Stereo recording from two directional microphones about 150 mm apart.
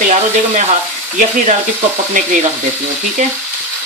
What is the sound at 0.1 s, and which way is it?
Speech, 50° right (ahead or behind).